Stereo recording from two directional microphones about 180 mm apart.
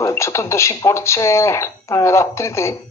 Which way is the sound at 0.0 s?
15° left (ahead or behind).